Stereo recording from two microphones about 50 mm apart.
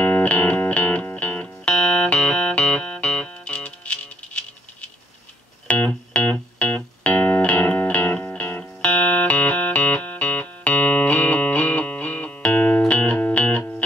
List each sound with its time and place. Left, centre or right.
0.0 s music: left
5.7 s music: left
8.8 s music: left